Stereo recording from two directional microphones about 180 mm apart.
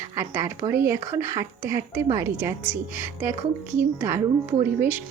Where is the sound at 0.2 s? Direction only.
15° right (ahead or behind).